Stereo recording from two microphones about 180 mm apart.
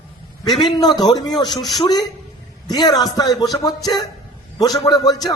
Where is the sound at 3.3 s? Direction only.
Centre (ahead or behind).